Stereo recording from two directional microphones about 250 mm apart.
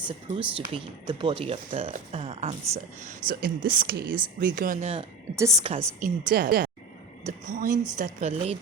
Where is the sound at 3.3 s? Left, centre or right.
Right.